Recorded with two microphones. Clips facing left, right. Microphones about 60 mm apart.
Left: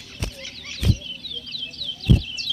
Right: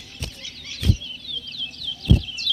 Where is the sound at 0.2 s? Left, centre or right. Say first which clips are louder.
Left 3 dB; left.